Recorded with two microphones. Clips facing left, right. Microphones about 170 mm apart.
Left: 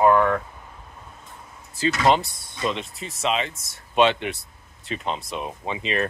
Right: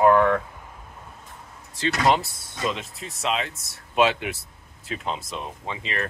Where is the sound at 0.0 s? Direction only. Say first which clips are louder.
Even; 5° left (ahead or behind).